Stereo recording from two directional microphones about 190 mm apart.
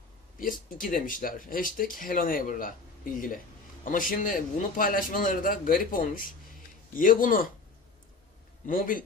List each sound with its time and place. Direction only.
0.4 s speech: 45° left (ahead or behind)
8.6 s speech: 45° left (ahead or behind)